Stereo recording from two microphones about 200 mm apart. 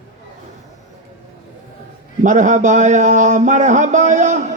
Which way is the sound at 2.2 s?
40° right (ahead or behind).